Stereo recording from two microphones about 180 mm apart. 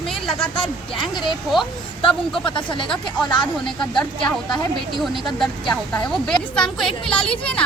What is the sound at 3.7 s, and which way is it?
Speech, 5° left (ahead or behind).